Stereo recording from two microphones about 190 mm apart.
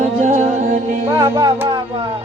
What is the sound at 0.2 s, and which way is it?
Music, 40° right (ahead or behind).